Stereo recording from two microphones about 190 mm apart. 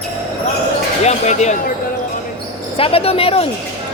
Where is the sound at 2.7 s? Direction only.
30° left (ahead or behind).